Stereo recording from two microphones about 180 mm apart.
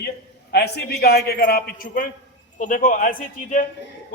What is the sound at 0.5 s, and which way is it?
A man's voice, 65° left (ahead or behind).